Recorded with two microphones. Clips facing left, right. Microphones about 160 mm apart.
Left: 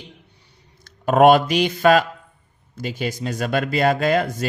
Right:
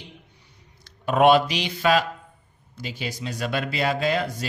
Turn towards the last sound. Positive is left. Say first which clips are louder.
# left 5 dB
turn(degrees=50)  # may be behind; listen again after turning